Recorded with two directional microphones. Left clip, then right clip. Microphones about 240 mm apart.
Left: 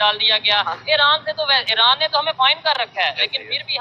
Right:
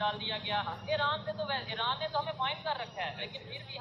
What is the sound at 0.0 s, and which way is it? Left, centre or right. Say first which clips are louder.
Speech: left 18 dB; left.